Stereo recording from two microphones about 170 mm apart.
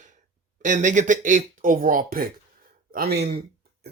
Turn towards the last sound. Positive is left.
turn(degrees=-70)  # may be behind; listen again after turning